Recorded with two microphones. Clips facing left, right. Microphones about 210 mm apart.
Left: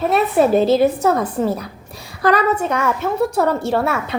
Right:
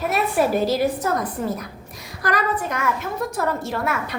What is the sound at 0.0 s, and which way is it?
A woman's voice, 25° left (ahead or behind).